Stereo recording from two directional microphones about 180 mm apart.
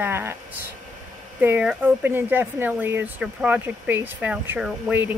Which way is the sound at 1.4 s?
5° right (ahead or behind).